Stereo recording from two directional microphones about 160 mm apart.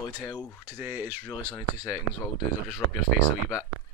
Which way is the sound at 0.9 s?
15° right (ahead or behind).